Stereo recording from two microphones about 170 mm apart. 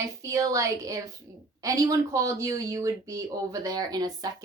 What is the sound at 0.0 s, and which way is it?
Speech, 20° right (ahead or behind).